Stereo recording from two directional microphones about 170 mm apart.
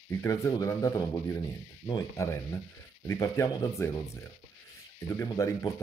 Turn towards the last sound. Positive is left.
turn(degrees=20)  # may be behind; listen again after turning